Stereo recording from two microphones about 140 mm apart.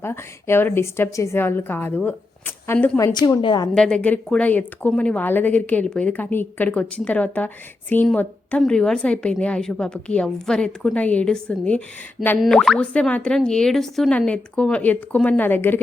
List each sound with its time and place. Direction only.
0.0 s speech: 15° left (ahead or behind)
3.0 s a woman's voice: 30° left (ahead or behind)
3.8 s speech: 5° left (ahead or behind)